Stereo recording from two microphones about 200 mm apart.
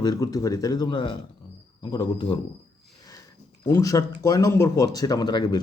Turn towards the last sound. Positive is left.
turn(degrees=20)  # may be behind; listen again after turning